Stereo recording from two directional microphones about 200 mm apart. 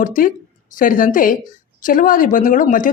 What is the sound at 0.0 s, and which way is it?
A woman's voice, 40° left (ahead or behind).